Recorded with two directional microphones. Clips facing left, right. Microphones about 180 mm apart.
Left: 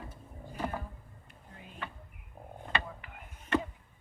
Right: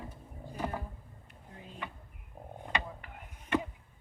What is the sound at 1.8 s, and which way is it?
Speech, 15° right (ahead or behind).